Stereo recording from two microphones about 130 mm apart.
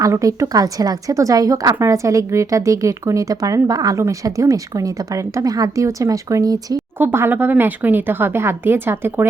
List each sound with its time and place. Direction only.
0.0 s a woman's voice: 25° right (ahead or behind)
7.0 s a woman's voice: 15° right (ahead or behind)